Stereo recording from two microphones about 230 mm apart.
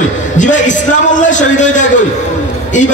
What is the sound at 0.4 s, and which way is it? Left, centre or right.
A man's voice, left.